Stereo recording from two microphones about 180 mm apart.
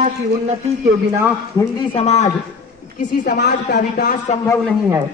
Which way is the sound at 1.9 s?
35° left (ahead or behind).